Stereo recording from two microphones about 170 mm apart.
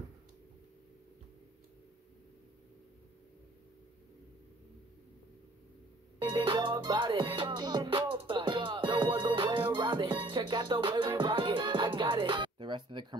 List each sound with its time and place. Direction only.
6.1 s music: 25° right (ahead or behind)